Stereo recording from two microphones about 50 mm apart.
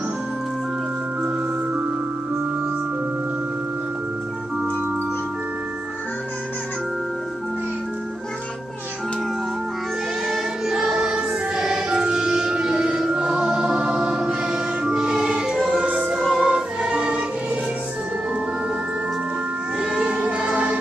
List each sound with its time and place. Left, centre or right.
10.2 s music: centre
16.0 s music: centre
19.8 s music: centre
20.2 s music: right